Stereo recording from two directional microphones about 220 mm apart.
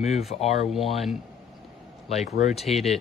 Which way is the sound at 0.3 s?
30° left (ahead or behind).